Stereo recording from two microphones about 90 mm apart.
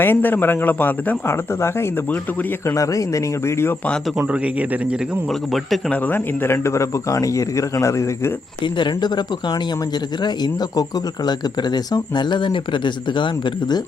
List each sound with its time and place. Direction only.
0.0 s speech: 20° left (ahead or behind)
4.2 s a man's voice: 15° right (ahead or behind)
5.9 s speech: 25° left (ahead or behind)
8.6 s speech: 55° left (ahead or behind)